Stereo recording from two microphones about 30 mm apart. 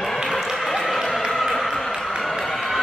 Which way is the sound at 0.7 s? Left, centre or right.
Centre.